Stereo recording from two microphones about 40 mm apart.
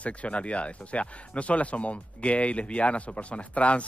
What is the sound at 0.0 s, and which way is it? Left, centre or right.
Speech, left.